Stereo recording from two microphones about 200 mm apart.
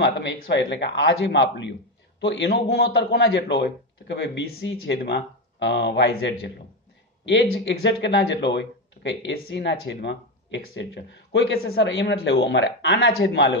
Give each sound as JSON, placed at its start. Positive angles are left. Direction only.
{"t": 0.0, "sound": "a man's voice", "side_deg": 60}